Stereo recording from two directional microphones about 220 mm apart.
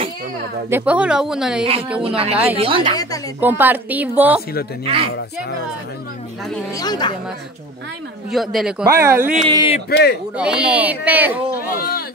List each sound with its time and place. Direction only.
0.7 s a woman's voice: 10° right (ahead or behind)
2.0 s speech: 25° right (ahead or behind)
3.3 s a woman's voice: 10° right (ahead or behind)
6.8 s speech: 20° left (ahead or behind)
8.3 s a woman's voice: centre (ahead or behind)
9.8 s speech: 50° left (ahead or behind)
10.3 s a woman's voice: 5° right (ahead or behind)
11.6 s speech: 40° left (ahead or behind)